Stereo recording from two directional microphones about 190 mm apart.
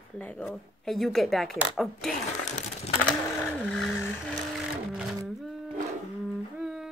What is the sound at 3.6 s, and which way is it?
Speech, 5° left (ahead or behind).